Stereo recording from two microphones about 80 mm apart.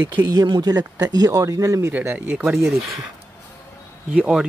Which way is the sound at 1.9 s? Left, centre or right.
Right.